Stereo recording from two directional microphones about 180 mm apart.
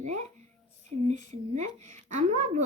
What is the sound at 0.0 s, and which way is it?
Speech, 40° right (ahead or behind).